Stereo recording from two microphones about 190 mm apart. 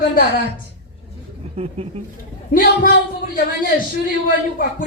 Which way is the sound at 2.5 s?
50° left (ahead or behind).